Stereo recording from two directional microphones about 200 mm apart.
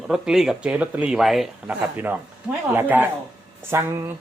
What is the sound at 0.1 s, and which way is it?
Speech, centre (ahead or behind).